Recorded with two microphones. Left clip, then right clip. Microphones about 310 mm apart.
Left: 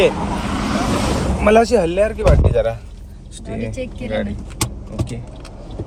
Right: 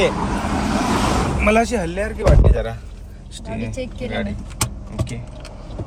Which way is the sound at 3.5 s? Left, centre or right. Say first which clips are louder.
Left 2 dB; right.